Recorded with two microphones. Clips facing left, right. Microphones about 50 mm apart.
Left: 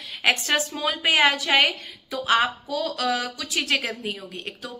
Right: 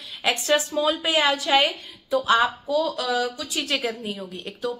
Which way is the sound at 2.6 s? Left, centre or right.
Left.